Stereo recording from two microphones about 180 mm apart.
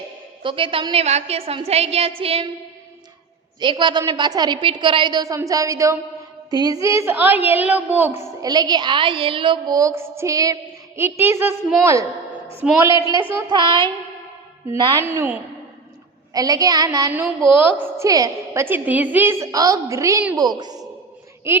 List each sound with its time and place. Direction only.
0.4 s a woman's voice: 30° right (ahead or behind)
3.6 s a woman's voice: 25° right (ahead or behind)
13.5 s a woman's voice: 25° right (ahead or behind)